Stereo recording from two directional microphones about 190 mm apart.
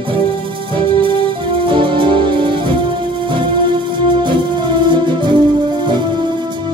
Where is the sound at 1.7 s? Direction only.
25° right (ahead or behind).